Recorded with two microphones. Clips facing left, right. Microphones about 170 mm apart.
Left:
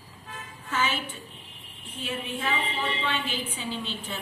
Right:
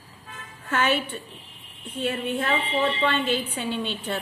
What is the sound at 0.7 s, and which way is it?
Speech, 65° right (ahead or behind).